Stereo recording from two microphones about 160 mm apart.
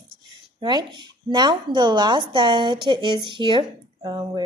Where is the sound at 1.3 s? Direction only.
30° right (ahead or behind).